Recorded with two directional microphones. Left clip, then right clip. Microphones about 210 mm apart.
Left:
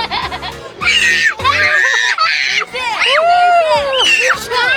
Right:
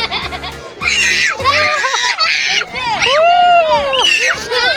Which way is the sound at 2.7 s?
50° left (ahead or behind).